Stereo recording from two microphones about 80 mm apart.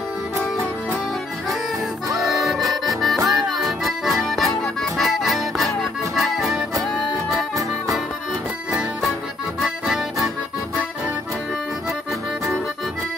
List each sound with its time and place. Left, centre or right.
2.1 s accordion: centre
9.6 s music: centre